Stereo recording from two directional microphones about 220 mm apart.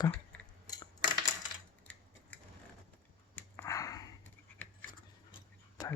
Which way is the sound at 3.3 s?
15° left (ahead or behind).